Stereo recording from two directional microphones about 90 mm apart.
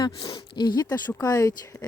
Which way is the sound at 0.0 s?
65° left (ahead or behind).